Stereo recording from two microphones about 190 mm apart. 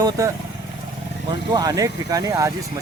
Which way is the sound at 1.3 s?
20° right (ahead or behind).